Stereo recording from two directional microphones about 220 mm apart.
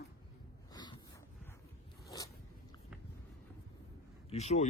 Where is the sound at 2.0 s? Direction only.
15° left (ahead or behind).